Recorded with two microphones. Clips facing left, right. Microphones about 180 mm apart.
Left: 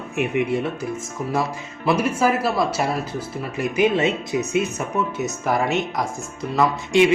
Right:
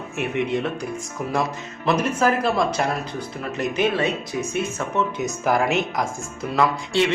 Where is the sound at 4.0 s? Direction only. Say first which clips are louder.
Left 3 dB; 20° left (ahead or behind).